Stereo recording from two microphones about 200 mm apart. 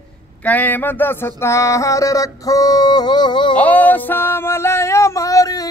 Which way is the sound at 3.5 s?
10° left (ahead or behind).